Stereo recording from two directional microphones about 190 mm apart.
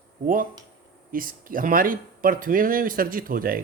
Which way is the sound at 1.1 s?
45° right (ahead or behind).